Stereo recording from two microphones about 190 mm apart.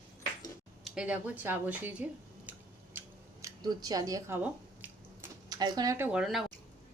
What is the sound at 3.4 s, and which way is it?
Scissors, 20° right (ahead or behind).